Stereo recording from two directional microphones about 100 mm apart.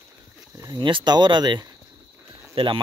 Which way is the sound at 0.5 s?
40° right (ahead or behind).